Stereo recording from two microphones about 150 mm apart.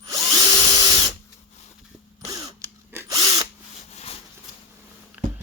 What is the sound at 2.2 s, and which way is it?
Drill, 25° right (ahead or behind).